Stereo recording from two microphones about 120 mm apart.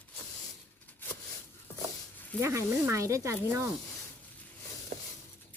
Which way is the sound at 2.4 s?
25° right (ahead or behind).